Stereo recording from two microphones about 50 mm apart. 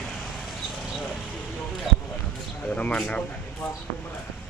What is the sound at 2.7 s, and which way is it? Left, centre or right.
Speech, left.